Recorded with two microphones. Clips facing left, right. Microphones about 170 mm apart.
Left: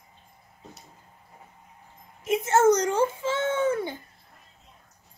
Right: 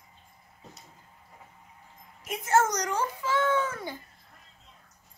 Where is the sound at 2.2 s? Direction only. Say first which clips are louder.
Left 5 dB; 25° left (ahead or behind).